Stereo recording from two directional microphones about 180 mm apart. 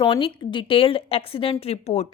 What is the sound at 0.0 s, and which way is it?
A woman's voice, 30° left (ahead or behind).